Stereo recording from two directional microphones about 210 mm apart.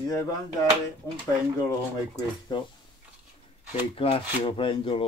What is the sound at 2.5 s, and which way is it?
Speech, 20° left (ahead or behind).